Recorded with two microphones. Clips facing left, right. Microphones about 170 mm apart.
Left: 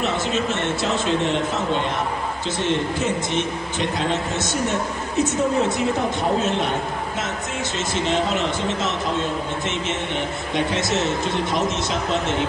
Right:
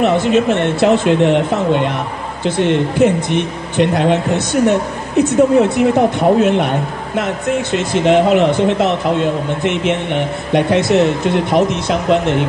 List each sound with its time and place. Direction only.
0.0 s speech: 60° right (ahead or behind)